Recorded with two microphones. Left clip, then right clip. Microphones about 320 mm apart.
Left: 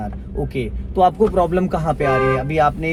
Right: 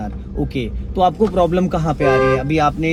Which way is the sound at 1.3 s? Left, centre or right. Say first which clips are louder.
Right 1 dB; left.